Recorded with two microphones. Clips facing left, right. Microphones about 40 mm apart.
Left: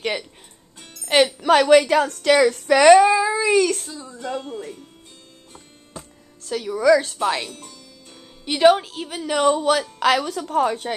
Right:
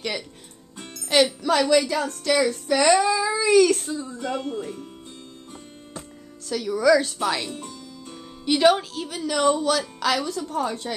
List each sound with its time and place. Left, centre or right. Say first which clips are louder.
0.7 s music: right 5 dB; centre
1.0 s music: left 2 dB; left
1.4 s a woman's voice: left 6 dB; left
3.0 s speech: left 5 dB; left
3.5 s speech: right 2 dB; centre
6.4 s a woman's voice: left 2 dB; centre
7.5 s music: right 5 dB; centre
8.5 s a woman's voice: left 3 dB; centre; by 10.9 s left